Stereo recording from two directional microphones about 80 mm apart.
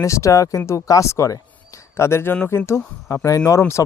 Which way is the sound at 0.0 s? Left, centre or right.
Left.